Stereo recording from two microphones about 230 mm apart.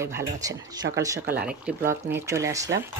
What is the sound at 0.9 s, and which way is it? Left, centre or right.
Speech, centre.